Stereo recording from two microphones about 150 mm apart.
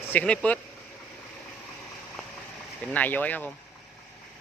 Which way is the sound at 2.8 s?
10° left (ahead or behind).